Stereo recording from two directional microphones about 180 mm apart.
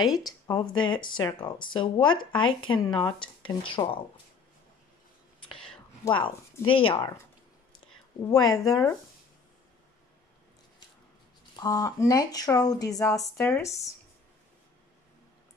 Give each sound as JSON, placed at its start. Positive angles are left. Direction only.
{"t": 0.1, "sound": "speech", "side_deg": 20}
{"t": 6.0, "sound": "speech", "side_deg": 30}
{"t": 8.2, "sound": "speech", "side_deg": 20}
{"t": 11.5, "sound": "speech", "side_deg": 20}